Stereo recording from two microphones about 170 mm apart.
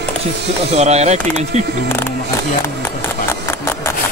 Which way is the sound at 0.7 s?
40° right (ahead or behind).